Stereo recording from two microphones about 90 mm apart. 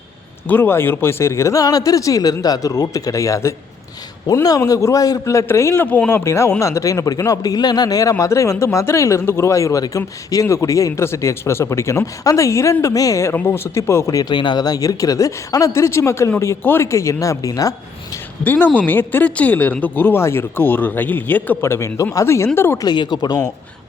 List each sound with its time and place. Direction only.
0.4 s speech: 25° left (ahead or behind)
13.3 s speech: 25° left (ahead or behind)
14.2 s speech: 55° left (ahead or behind)
18.4 s speech: 20° left (ahead or behind)
21.6 s speech: 30° left (ahead or behind)
22.8 s speech: 50° left (ahead or behind)